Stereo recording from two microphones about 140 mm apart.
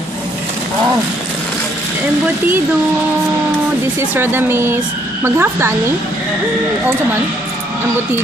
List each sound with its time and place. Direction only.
4.1 s a woman's voice: 15° right (ahead or behind)